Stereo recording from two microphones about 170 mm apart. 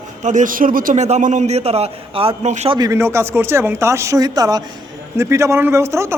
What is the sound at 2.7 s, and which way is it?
Speech, 20° right (ahead or behind).